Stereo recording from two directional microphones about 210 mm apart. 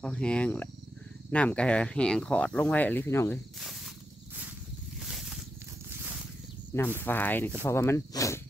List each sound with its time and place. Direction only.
0.0 s speech: 5° left (ahead or behind)
3.5 s snake: centre (ahead or behind)
5.0 s a sound: centre (ahead or behind)
7.0 s speech: 10° left (ahead or behind)